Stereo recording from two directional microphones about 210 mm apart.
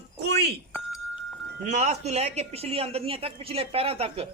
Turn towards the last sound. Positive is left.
turn(degrees=-30)  # may be behind; listen again after turning